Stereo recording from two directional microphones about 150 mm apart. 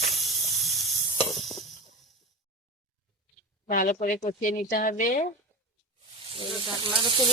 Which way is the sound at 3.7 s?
65° left (ahead or behind).